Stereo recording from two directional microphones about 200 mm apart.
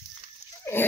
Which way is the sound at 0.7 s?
10° left (ahead or behind).